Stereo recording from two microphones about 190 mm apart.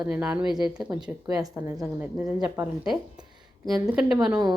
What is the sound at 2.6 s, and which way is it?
Speech, 5° right (ahead or behind).